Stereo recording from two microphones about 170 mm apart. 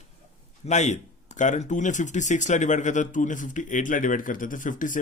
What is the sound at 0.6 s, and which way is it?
Speech, 45° left (ahead or behind).